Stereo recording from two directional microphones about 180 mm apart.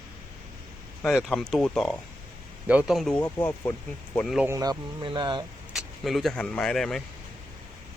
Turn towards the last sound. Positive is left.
turn(degrees=0)  # may be behind; listen again after turning